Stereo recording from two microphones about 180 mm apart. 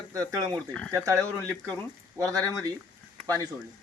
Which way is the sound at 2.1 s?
20° right (ahead or behind).